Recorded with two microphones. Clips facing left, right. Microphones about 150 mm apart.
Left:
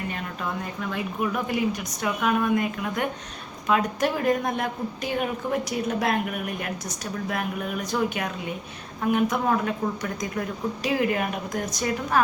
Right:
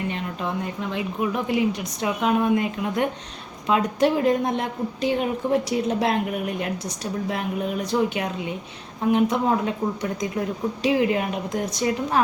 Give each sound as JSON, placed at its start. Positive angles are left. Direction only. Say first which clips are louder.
{"t": 0.6, "sound": "a woman's voice", "louder": "right 2 dB", "side_deg": -20}